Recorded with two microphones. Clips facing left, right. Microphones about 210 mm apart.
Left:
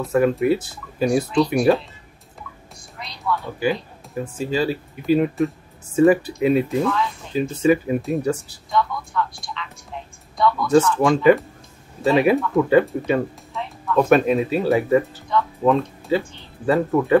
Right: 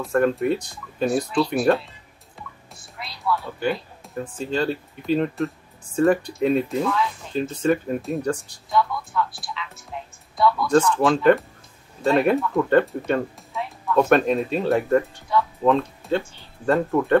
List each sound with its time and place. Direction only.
0.0 s speech: 5° left (ahead or behind)
1.6 s speech: 5° right (ahead or behind)
3.0 s speech: 5° right (ahead or behind)